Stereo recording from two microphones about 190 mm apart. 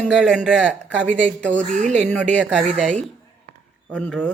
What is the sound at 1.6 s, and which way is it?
Speech, 40° right (ahead or behind).